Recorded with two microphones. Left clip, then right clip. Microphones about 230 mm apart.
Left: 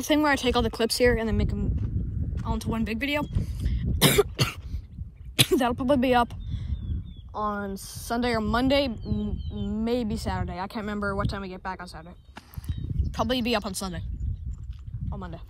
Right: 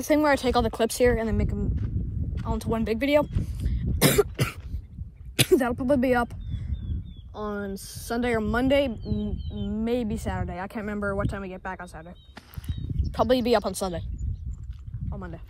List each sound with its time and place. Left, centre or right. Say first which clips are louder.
0.0 s a woman's voice: right 1 dB; centre
4.0 s cough: left 1 dB; centre
5.4 s speech: right 1 dB; centre
7.8 s a woman's voice: even; centre
12.6 s a sound: right 1 dB; centre
13.1 s speech: right 5 dB; centre
15.0 s speech: even; centre